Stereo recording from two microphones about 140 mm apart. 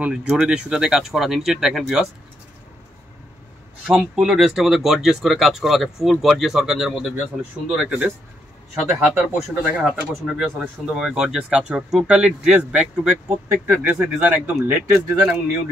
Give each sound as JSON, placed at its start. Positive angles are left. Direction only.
{"t": 0.0, "sound": "speech", "side_deg": -5}
{"t": 3.8, "sound": "speech", "side_deg": -5}
{"t": 14.9, "sound": "speech", "side_deg": -20}